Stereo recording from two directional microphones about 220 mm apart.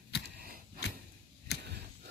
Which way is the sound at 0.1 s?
50° left (ahead or behind).